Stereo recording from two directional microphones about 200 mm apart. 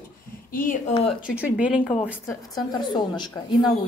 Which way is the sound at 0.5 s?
40° left (ahead or behind).